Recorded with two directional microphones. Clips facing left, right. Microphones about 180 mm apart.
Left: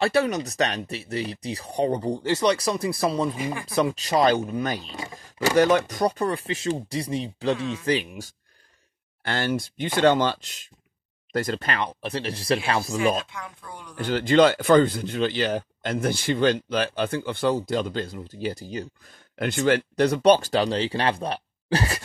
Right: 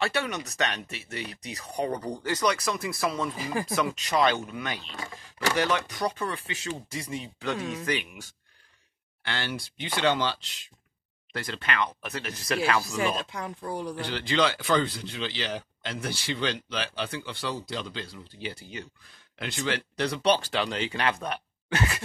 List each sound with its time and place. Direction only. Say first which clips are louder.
0.0 s speech: left 7 dB; 35° left (ahead or behind)
4.9 s speech: left 4 dB; 15° left (ahead or behind)
5.5 s speech: left 8 dB; 40° left (ahead or behind)
13.2 s speech: right 3 dB; 35° right (ahead or behind)
13.9 s speech: left 11 dB; 45° left (ahead or behind)
19.3 s speech: left 9 dB; 50° left (ahead or behind)